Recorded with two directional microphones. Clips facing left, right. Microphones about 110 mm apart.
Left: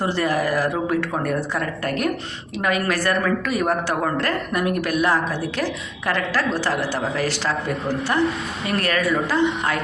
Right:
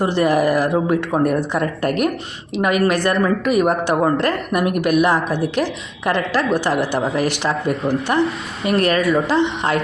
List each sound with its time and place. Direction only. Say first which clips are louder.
0.0 s a woman's voice: right 5 dB; 20° right (ahead or behind)
8.6 s a woman's voice: right 6 dB; 20° right (ahead or behind)